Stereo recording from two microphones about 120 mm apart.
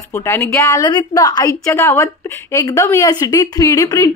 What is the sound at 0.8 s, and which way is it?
A woman's voice, 35° left (ahead or behind).